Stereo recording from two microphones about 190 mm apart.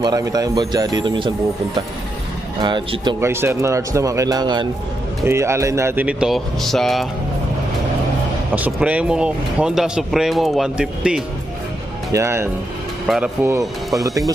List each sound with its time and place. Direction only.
0.0 s speech: 20° right (ahead or behind)
2.6 s speech: 25° right (ahead or behind)
3.2 s speech: 15° right (ahead or behind)
8.5 s speech: 5° right (ahead or behind)
13.0 s speech: 5° right (ahead or behind)